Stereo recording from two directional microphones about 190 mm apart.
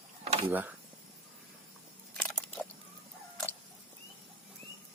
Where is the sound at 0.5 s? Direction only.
10° right (ahead or behind).